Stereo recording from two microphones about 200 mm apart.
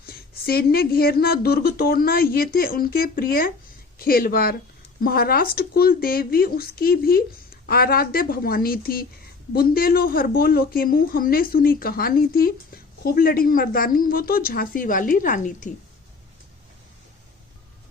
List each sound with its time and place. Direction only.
0.0 s speech: 50° left (ahead or behind)